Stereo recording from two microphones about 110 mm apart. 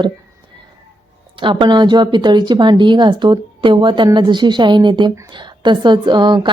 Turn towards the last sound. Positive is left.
turn(degrees=-45)  # may be behind; listen again after turning